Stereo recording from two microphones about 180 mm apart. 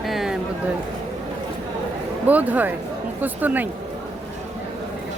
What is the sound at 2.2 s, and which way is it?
Speech, 10° right (ahead or behind).